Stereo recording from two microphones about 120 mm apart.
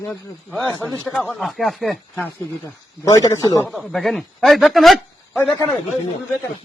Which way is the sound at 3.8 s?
Centre (ahead or behind).